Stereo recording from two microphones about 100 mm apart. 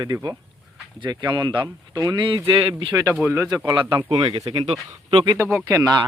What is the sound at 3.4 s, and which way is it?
Speech, 40° right (ahead or behind).